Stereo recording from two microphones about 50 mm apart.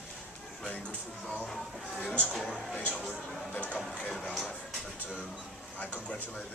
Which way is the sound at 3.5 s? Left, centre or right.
Left.